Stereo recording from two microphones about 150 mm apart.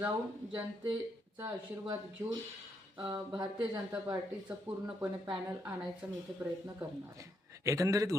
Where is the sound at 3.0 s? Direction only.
35° right (ahead or behind).